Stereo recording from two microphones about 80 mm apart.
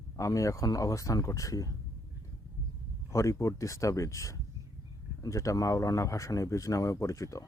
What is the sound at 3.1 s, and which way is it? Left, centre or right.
Speech, left.